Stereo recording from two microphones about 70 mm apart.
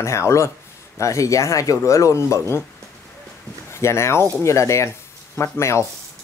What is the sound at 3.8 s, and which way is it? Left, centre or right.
Speech, left.